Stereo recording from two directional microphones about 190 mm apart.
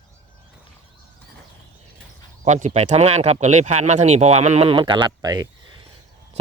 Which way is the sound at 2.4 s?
40° right (ahead or behind).